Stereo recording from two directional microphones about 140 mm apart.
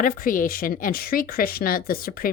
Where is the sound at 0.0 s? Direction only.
75° left (ahead or behind).